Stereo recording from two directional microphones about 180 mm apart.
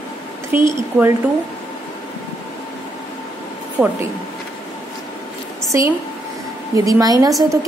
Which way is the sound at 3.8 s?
10° right (ahead or behind).